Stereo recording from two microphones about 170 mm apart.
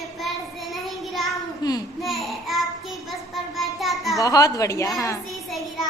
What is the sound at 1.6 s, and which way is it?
Speech, 25° left (ahead or behind).